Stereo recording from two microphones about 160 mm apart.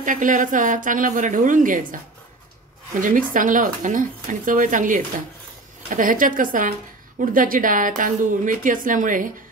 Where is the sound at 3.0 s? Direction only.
55° right (ahead or behind).